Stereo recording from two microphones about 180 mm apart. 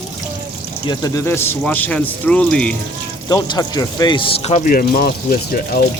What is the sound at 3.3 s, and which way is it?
Speech, 20° left (ahead or behind).